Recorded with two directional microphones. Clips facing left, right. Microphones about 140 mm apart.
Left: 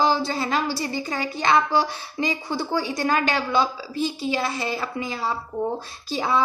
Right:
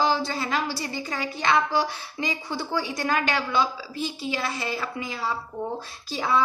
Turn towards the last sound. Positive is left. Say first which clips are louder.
# left 1 dB
turn(degrees=25)  # may be behind; listen again after turning